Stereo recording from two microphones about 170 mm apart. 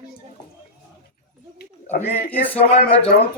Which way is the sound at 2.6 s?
35° left (ahead or behind).